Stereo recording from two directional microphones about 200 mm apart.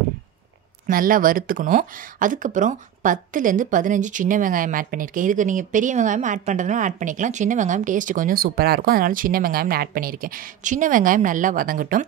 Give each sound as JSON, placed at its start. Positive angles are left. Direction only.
{"t": 0.8, "sound": "speech", "side_deg": -45}